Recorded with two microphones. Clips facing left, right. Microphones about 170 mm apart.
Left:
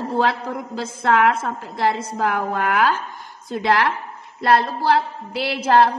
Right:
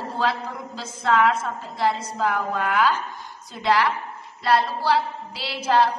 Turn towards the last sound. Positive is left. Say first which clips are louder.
# left 4 dB
turn(degrees=55)  # may be behind; listen again after turning